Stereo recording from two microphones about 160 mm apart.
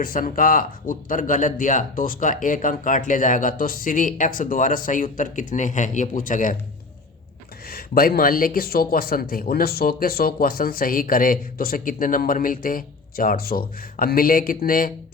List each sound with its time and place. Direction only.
0.0 s speech: 60° left (ahead or behind)
7.7 s speech: 70° left (ahead or behind)